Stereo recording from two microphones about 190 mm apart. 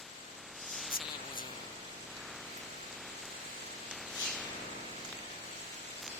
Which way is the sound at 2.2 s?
Centre (ahead or behind).